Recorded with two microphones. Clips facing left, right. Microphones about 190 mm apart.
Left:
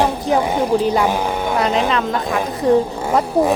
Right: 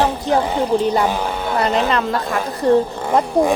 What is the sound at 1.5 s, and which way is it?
Speech, centre (ahead or behind).